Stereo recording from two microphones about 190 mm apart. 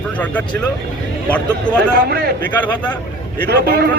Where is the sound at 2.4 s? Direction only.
10° left (ahead or behind).